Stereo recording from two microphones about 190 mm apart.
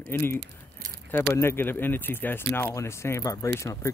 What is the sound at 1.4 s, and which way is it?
Speech, 10° left (ahead or behind).